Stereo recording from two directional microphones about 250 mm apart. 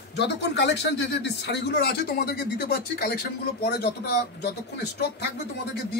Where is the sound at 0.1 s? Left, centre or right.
Left.